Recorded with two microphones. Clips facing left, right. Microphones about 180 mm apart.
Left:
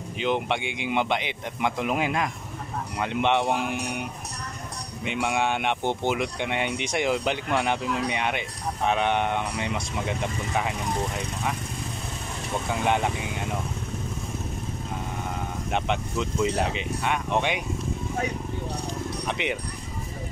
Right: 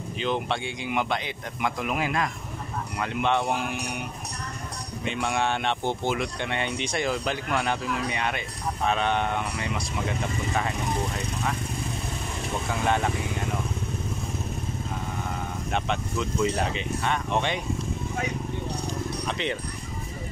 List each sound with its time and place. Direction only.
0.2 s speech: 15° left (ahead or behind)
5.1 s speech: 15° left (ahead or behind)
12.8 s speech: 15° left (ahead or behind)
15.7 s speech: 15° left (ahead or behind)
19.2 s speech: 15° left (ahead or behind)